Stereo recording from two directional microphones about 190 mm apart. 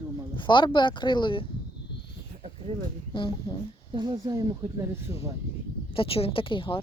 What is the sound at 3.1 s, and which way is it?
Speech, 25° left (ahead or behind).